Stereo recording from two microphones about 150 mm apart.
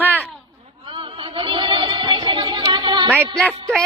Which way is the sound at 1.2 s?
35° right (ahead or behind).